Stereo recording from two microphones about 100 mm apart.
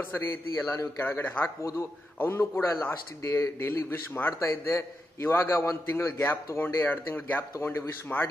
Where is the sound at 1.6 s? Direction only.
30° left (ahead or behind).